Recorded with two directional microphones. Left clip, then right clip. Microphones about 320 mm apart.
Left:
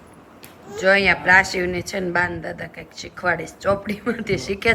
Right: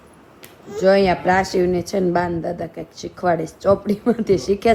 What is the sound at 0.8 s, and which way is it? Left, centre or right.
Speech, centre.